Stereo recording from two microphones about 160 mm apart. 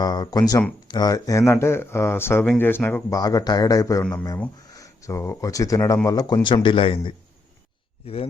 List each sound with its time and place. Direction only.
0.0 s speech: 25° left (ahead or behind)